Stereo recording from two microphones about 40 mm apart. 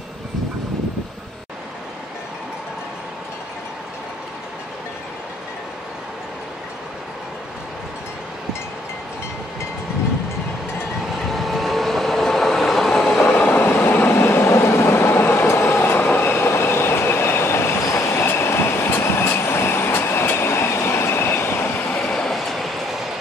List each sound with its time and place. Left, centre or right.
11.2 s train: centre
13.6 s vehicle: left
14.1 s train: left
22.0 s train: centre
22.3 s train: centre